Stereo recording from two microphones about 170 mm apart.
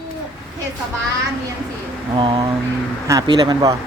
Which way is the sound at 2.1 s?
30° right (ahead or behind).